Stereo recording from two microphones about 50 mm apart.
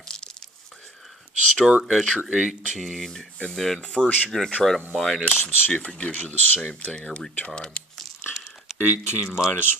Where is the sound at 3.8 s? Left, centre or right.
Centre.